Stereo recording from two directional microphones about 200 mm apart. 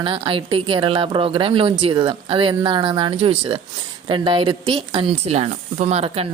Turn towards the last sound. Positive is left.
turn(degrees=-30)  # may be behind; listen again after turning